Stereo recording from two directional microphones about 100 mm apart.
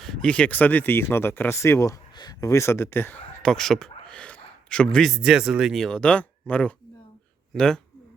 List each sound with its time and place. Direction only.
0.0 s speech: 5° left (ahead or behind); by 2.0 s 30° left (ahead or behind)
2.1 s speech: 40° left (ahead or behind); by 3.2 s 25° left (ahead or behind)
3.4 s a man's voice: 5° left (ahead or behind)
5.1 s speech: 5° right (ahead or behind)